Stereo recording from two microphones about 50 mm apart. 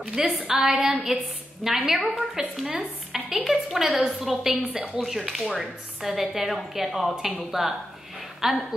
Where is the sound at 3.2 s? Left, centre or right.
Centre.